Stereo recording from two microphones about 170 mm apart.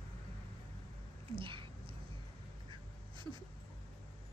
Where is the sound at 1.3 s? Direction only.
30° right (ahead or behind).